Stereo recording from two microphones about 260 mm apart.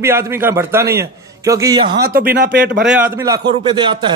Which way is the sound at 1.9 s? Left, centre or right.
Right.